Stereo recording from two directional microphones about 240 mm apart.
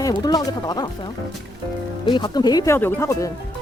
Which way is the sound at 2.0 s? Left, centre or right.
Centre.